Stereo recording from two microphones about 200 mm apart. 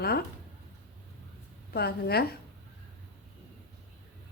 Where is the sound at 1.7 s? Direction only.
50° left (ahead or behind).